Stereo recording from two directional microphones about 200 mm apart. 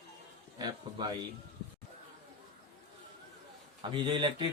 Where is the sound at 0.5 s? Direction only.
20° right (ahead or behind).